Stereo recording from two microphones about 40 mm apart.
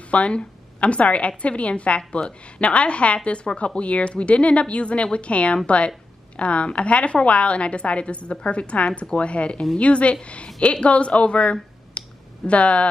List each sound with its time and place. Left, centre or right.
0.1 s a woman's voice: left